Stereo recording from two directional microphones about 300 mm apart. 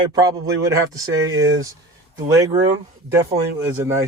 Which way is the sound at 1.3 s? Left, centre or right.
Right.